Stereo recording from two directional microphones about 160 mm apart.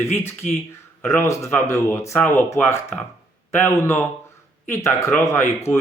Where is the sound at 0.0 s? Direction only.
15° left (ahead or behind).